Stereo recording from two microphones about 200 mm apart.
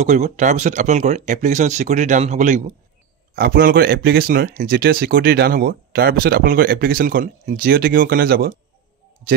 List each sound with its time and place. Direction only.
0.0 s speech: 35° right (ahead or behind)
3.3 s speech: 50° right (ahead or behind)